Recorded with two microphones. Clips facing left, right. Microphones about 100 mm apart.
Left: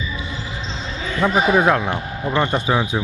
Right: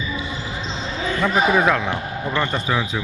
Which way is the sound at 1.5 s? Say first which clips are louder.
Left 2 dB; 15° left (ahead or behind).